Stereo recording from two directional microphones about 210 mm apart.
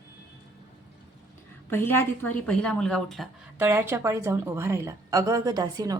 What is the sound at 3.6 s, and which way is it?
A woman's voice, 10° right (ahead or behind).